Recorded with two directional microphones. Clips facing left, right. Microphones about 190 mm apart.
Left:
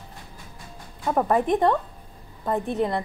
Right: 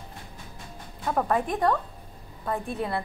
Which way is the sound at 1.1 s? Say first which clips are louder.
Left 5 dB; 20° left (ahead or behind).